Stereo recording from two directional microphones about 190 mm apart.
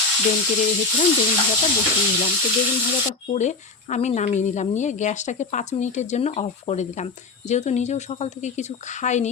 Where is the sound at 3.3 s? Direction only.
40° left (ahead or behind).